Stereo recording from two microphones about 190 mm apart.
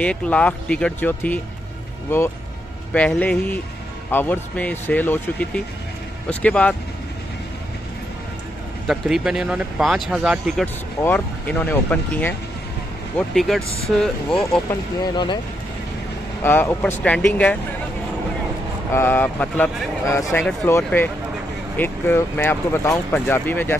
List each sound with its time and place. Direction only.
0.0 s speech: 5° left (ahead or behind)
8.8 s speech: centre (ahead or behind)
10.6 s speech: 10° left (ahead or behind)
14.7 s speech: 25° left (ahead or behind)
16.4 s speech: 10° left (ahead or behind)
18.9 s speech: 10° left (ahead or behind)